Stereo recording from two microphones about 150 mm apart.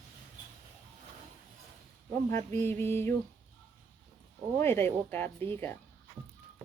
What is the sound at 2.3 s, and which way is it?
Speech, 15° left (ahead or behind).